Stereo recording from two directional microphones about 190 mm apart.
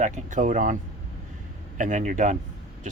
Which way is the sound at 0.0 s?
40° right (ahead or behind).